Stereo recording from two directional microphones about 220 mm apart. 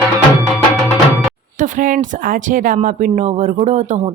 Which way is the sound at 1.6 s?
35° right (ahead or behind).